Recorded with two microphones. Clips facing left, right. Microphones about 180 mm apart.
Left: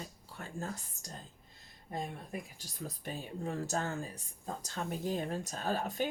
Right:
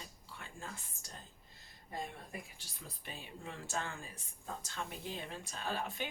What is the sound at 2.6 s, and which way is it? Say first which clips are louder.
Speech: left 9 dB; 45° left (ahead or behind).